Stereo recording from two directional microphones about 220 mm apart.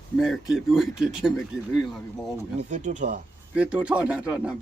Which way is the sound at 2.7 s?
35° right (ahead or behind).